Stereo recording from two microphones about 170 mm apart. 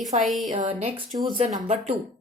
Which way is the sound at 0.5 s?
40° right (ahead or behind).